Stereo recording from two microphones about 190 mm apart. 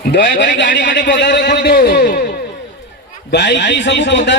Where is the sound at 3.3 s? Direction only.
65° left (ahead or behind).